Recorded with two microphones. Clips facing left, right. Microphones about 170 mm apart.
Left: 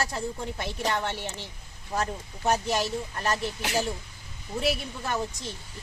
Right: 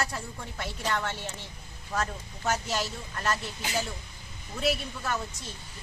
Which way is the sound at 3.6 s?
75° left (ahead or behind).